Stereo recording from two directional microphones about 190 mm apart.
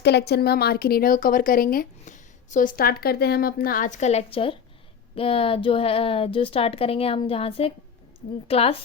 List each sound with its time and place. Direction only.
0.0 s a woman's voice: 60° left (ahead or behind); by 8.8 s 30° left (ahead or behind)